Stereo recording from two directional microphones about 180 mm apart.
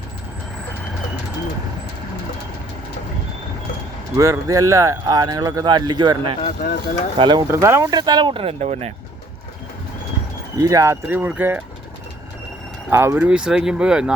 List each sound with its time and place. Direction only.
4.2 s speech: 20° right (ahead or behind)
6.4 s speech: 45° left (ahead or behind)
7.2 s speech: 25° right (ahead or behind)
7.4 s speech: 15° right (ahead or behind); by 8.9 s 35° right (ahead or behind)
10.6 s speech: 20° right (ahead or behind)
12.9 s speech: 15° right (ahead or behind)